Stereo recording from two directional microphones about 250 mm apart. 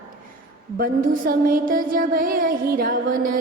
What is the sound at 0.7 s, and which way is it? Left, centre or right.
Music, right.